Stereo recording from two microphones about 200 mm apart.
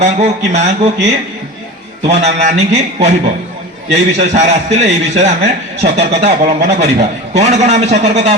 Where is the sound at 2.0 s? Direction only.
35° right (ahead or behind).